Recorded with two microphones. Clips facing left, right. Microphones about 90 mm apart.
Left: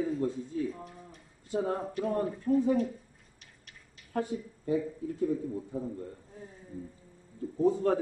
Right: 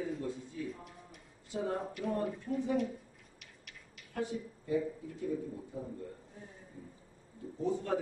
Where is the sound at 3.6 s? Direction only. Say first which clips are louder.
Even; 35° left (ahead or behind).